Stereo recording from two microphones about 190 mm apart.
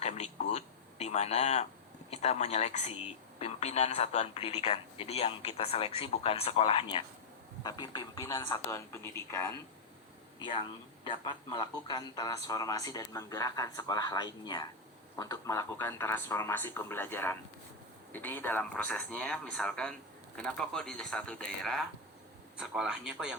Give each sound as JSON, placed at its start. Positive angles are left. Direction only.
{"t": 0.0, "sound": "a sound", "side_deg": 35}
{"t": 2.0, "sound": "speech", "side_deg": 35}
{"t": 11.0, "sound": "speech", "side_deg": 25}